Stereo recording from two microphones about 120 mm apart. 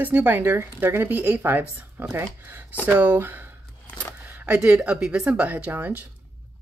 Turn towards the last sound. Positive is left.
turn(degrees=-15)  # may be behind; listen again after turning